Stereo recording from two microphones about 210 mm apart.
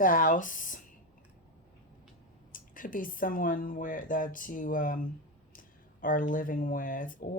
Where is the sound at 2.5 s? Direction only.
40° left (ahead or behind).